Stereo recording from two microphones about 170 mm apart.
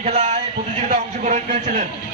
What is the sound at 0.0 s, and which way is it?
A man's voice, 40° right (ahead or behind).